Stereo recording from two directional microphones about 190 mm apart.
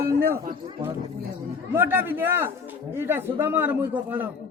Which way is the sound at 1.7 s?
10° right (ahead or behind).